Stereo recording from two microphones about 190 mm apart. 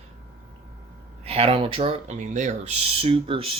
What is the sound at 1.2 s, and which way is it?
Speech, 30° right (ahead or behind).